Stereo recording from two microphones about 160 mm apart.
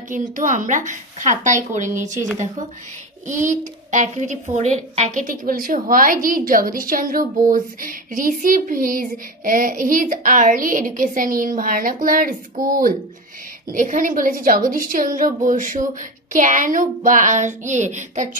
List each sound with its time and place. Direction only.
0.1 s a child's voice: 55° right (ahead or behind)
2.0 s speech: 15° right (ahead or behind)
3.3 s a child's voice: 50° right (ahead or behind)